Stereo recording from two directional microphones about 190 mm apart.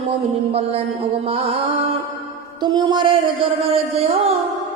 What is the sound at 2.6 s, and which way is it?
Speech, 20° right (ahead or behind).